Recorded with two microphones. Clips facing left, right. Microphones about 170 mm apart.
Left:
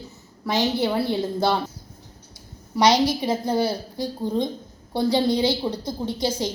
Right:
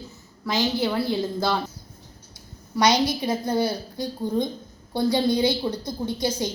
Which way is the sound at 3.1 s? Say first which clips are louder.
Left 1 dB; 25° left (ahead or behind).